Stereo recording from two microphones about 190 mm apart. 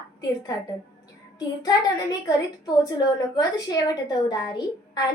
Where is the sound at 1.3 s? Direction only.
20° left (ahead or behind).